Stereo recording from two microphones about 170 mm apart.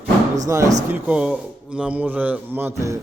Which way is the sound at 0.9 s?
10° right (ahead or behind).